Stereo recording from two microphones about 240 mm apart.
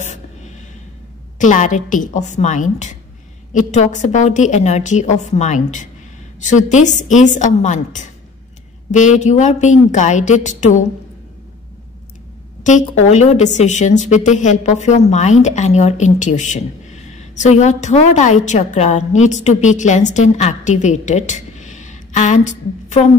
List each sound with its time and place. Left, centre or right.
0.0 s a sound: left
1.4 s a woman's voice: left
13.1 s a woman's voice: left